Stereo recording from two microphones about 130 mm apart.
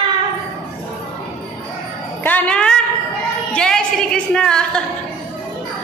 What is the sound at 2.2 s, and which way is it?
Music, 10° left (ahead or behind).